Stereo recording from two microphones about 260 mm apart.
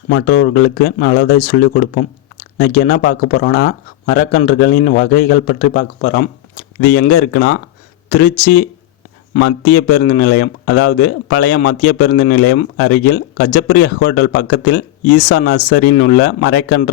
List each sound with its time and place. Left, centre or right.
0.1 s speech: left
6.8 s speech: left